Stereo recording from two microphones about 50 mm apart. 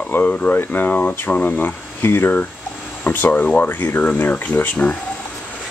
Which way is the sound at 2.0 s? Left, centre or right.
Left.